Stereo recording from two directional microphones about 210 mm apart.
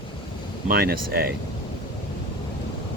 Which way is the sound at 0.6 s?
45° right (ahead or behind).